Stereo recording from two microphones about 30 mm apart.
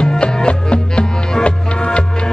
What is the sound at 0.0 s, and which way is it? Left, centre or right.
Music, left.